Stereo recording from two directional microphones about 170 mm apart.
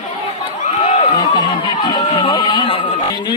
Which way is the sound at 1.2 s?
25° left (ahead or behind).